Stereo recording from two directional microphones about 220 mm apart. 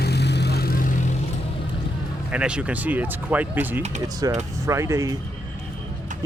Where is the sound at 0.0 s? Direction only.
50° left (ahead or behind).